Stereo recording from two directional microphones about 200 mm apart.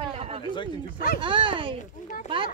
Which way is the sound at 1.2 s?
25° right (ahead or behind).